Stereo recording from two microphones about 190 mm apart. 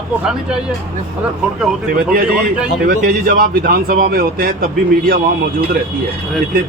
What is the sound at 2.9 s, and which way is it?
Speech, 55° right (ahead or behind).